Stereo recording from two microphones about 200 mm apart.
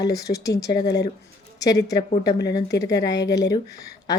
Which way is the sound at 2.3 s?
55° left (ahead or behind).